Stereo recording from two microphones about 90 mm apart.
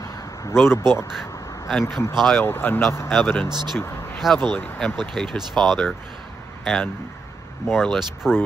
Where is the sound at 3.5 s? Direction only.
55° right (ahead or behind).